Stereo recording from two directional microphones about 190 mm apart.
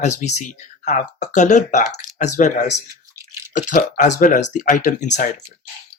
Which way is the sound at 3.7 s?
40° left (ahead or behind).